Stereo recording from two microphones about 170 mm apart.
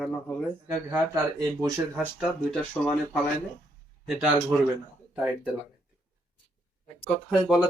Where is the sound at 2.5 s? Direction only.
Centre (ahead or behind).